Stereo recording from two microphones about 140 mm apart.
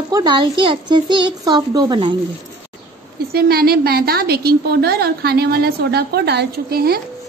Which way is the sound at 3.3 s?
90° right.